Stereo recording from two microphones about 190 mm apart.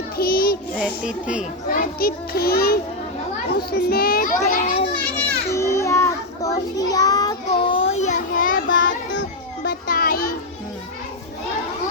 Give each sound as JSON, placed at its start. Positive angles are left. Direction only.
{"t": 0.2, "sound": "child singing", "side_deg": 55}
{"t": 0.8, "sound": "a child's voice", "side_deg": -5}
{"t": 1.7, "sound": "a child's voice", "side_deg": 50}
{"t": 4.4, "sound": "a child's voice", "side_deg": 40}
{"t": 5.1, "sound": "children playing", "side_deg": 15}
{"t": 6.7, "sound": "child singing", "side_deg": 20}
{"t": 9.6, "sound": "a sound", "side_deg": 50}